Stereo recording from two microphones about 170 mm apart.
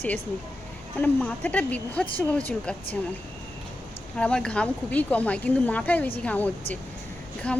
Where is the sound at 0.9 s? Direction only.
10° left (ahead or behind).